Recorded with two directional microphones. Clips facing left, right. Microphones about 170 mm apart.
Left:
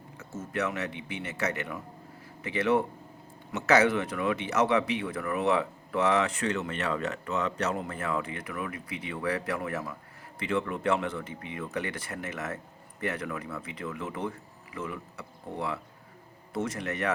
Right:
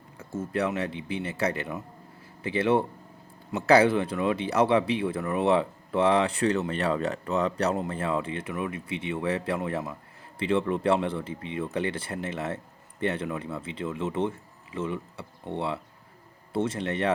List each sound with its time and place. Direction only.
0.2 s speech: 30° right (ahead or behind)